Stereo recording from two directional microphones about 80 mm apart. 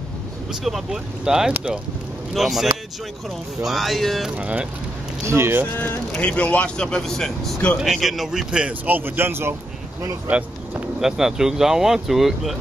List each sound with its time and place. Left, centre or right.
0.5 s a man's voice: centre
2.3 s speech: centre
4.4 s a man's voice: centre
5.2 s speech: right
6.1 s a man's voice: centre; by 10.8 s right
11.0 s speech: centre